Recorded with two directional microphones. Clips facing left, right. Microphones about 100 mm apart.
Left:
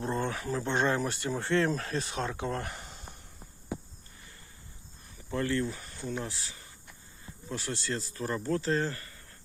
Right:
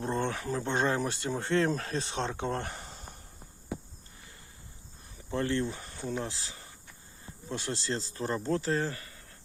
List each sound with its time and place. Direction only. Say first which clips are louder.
0.0 s speech: right 1 dB; 30° right (ahead or behind)
5.3 s speech: even; 25° right (ahead or behind)
8.7 s speech: left 1 dB; 10° right (ahead or behind)